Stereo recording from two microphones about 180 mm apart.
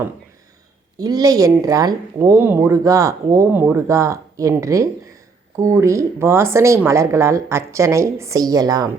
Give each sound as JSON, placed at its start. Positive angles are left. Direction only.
{"t": 0.9, "sound": "speech", "side_deg": -20}